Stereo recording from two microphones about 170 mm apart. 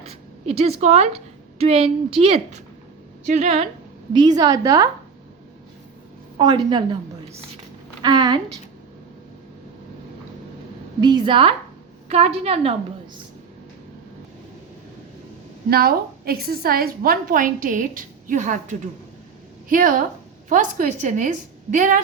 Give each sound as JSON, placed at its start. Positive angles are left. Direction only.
{"t": 0.1, "sound": "a woman's voice", "side_deg": -35}
{"t": 4.1, "sound": "a woman's voice", "side_deg": -25}
{"t": 6.4, "sound": "a woman's voice", "side_deg": -25}
{"t": 8.0, "sound": "a woman's voice", "side_deg": -25}
{"t": 11.0, "sound": "a woman's voice", "side_deg": -25}
{"t": 15.7, "sound": "a woman's voice", "side_deg": -60}